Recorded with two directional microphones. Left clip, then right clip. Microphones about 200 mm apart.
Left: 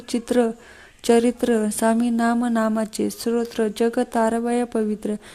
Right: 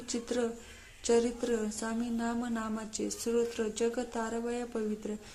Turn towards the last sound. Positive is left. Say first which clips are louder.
# left 12 dB
turn(degrees=40)  # may be behind; listen again after turning